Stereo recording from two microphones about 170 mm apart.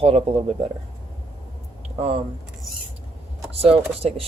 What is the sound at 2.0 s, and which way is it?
Speech, 35° right (ahead or behind).